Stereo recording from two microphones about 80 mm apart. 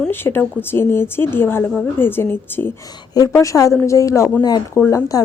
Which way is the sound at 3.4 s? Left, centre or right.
Left.